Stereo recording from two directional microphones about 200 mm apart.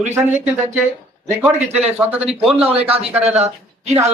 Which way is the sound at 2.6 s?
30° right (ahead or behind).